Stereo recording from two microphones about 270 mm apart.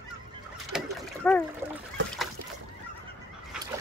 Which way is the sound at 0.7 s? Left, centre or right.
Centre.